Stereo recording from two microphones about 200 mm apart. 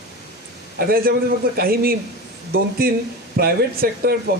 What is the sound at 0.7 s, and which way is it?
Speech, 50° right (ahead or behind).